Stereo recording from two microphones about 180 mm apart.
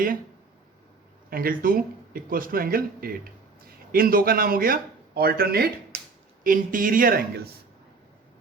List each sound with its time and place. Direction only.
1.3 s a man's voice: 55° right (ahead or behind)